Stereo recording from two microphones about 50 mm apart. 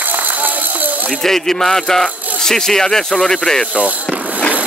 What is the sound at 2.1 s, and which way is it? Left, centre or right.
Music, right.